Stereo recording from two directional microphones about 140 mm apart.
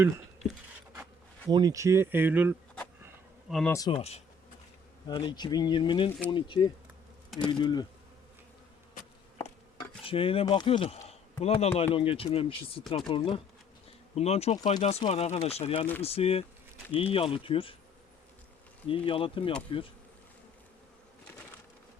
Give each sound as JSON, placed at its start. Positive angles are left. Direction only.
{"t": 1.5, "sound": "speech", "side_deg": -30}
{"t": 3.8, "sound": "speech", "side_deg": 45}
{"t": 5.0, "sound": "speech", "side_deg": 35}
{"t": 10.0, "sound": "speech", "side_deg": 40}
{"t": 14.2, "sound": "speech", "side_deg": 50}
{"t": 18.9, "sound": "speech", "side_deg": 40}